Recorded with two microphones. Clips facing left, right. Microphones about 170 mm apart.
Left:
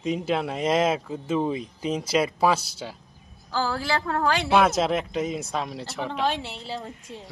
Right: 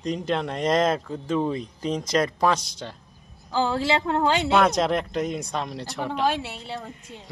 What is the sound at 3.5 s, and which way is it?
A woman's voice, 20° right (ahead or behind).